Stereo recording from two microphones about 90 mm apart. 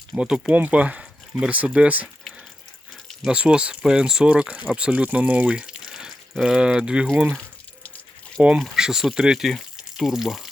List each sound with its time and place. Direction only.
0.2 s speech: 10° right (ahead or behind)
3.2 s speech: 10° right (ahead or behind)
7.1 s speech: 20° right (ahead or behind)
8.5 s speech: 5° right (ahead or behind)